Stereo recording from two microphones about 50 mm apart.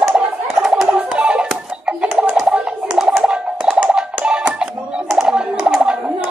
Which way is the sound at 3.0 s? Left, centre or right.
Centre.